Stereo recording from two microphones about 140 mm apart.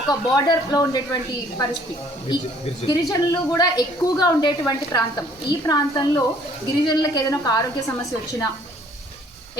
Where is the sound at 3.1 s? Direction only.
25° left (ahead or behind).